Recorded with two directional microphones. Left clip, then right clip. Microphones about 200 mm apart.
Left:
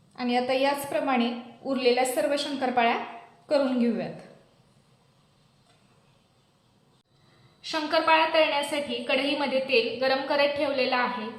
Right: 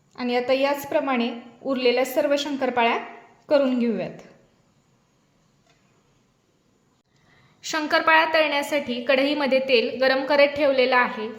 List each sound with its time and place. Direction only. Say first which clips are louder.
0.2 s a woman's voice: right 3 dB; 35° right (ahead or behind)
7.6 s a woman's voice: right 4 dB; 55° right (ahead or behind)